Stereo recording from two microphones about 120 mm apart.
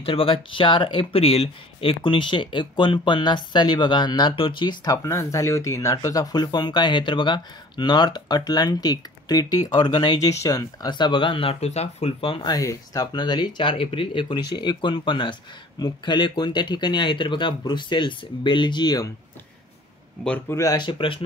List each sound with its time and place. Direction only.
0.0 s speech: 50° left (ahead or behind)
4.9 s speech: 25° left (ahead or behind); by 12.4 s 50° left (ahead or behind)
12.4 s speech: 30° left (ahead or behind)
20.4 s speech: 25° left (ahead or behind)
20.7 s speech: 45° left (ahead or behind)